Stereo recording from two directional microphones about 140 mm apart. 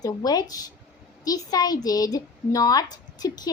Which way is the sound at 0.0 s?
25° left (ahead or behind).